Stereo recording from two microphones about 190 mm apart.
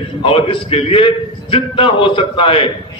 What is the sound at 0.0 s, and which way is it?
A man's voice, 25° left (ahead or behind).